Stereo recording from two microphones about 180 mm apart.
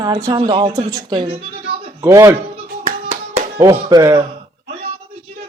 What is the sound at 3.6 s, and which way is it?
Speech, 20° right (ahead or behind).